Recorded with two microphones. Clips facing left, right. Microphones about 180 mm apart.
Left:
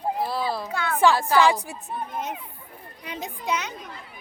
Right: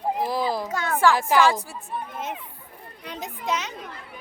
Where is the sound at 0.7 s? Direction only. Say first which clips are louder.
Right 1 dB; 45° right (ahead or behind).